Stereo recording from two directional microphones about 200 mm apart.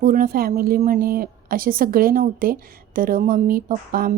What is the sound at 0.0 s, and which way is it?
A woman's voice, 45° right (ahead or behind).